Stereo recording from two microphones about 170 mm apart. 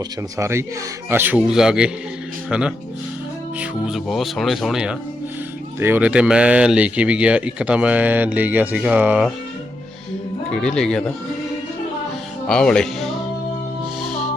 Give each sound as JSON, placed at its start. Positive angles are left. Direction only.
{"t": 0.3, "sound": "speech", "side_deg": -15}
{"t": 10.5, "sound": "speech", "side_deg": 5}
{"t": 12.5, "sound": "speech", "side_deg": 5}
{"t": 14.0, "sound": "music", "side_deg": 0}